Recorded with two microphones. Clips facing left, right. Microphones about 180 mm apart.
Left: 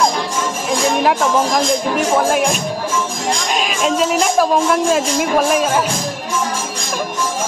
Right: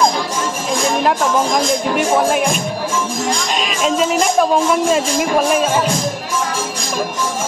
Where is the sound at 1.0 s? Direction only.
Centre (ahead or behind).